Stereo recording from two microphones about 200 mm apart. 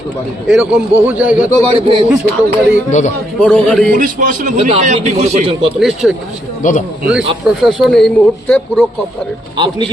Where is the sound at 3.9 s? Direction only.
40° right (ahead or behind).